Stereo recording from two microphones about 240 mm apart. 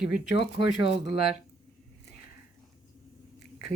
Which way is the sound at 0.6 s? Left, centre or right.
Left.